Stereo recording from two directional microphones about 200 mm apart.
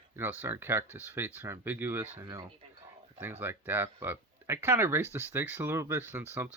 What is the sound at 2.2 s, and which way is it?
Speech, 20° right (ahead or behind).